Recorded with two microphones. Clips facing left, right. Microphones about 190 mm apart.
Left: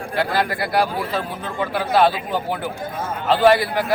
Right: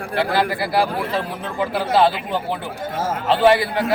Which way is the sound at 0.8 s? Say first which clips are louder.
Right 1 dB; 30° right (ahead or behind).